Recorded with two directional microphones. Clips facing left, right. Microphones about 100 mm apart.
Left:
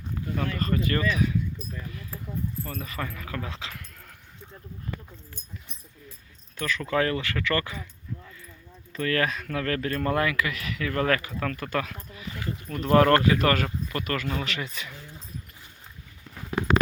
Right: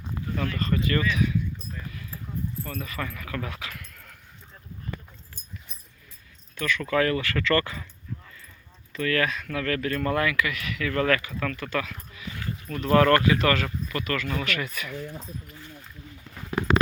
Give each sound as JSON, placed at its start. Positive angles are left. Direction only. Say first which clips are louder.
{"t": 0.5, "sound": "speech", "louder": "right 1 dB", "side_deg": 40}
{"t": 2.8, "sound": "speech", "louder": "even", "side_deg": 30}
{"t": 6.7, "sound": "speech", "louder": "right 2 dB", "side_deg": 30}
{"t": 8.9, "sound": "speech", "louder": "even", "side_deg": 35}
{"t": 12.4, "sound": "speech", "louder": "even", "side_deg": 20}